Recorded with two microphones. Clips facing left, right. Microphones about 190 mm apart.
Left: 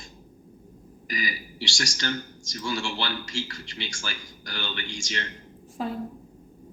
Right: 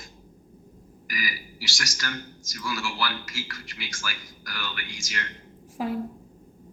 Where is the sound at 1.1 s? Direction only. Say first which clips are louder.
Left 2 dB; 25° left (ahead or behind).